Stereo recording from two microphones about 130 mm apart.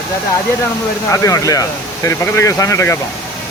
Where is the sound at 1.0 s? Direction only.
25° left (ahead or behind).